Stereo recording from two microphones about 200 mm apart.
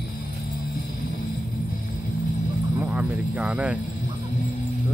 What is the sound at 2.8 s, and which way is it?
Speech, 10° right (ahead or behind).